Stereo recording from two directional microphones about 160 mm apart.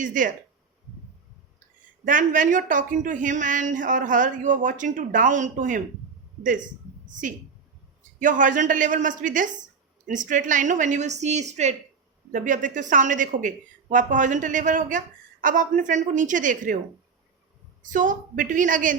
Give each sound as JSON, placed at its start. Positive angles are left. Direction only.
{"t": 0.0, "sound": "a woman's voice", "side_deg": -55}
{"t": 2.0, "sound": "speech", "side_deg": -55}
{"t": 7.1, "sound": "a woman's voice", "side_deg": -55}
{"t": 17.9, "sound": "speech", "side_deg": -55}